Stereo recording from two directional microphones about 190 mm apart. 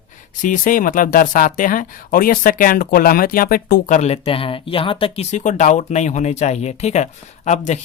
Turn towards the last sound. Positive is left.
turn(degrees=40)  # may be behind; listen again after turning